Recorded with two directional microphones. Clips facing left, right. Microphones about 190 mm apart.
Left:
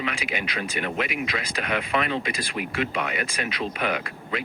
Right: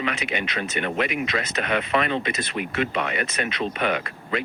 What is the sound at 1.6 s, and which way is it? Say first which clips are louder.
Speech: right 2 dB; 45° right (ahead or behind).